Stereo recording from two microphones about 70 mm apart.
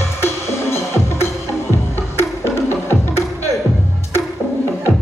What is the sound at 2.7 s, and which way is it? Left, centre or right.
Music, left.